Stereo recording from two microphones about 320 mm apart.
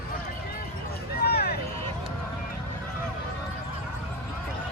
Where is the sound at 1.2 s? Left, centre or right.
Left.